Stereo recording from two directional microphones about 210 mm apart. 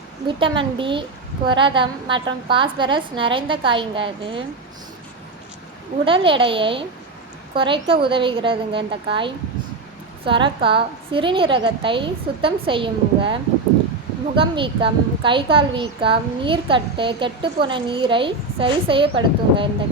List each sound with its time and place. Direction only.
0.3 s a woman's voice: 25° right (ahead or behind)
6.1 s a woman's voice: 25° right (ahead or behind)